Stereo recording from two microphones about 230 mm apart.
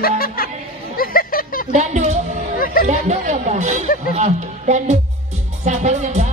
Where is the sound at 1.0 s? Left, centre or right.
Left.